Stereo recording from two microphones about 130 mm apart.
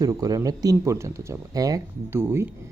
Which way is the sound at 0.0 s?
25° right (ahead or behind).